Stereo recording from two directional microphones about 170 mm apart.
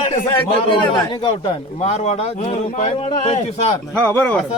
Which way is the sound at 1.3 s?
40° left (ahead or behind).